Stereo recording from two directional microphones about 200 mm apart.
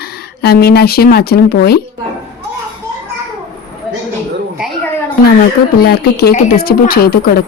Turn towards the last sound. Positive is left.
turn(degrees=50)  # may be behind; listen again after turning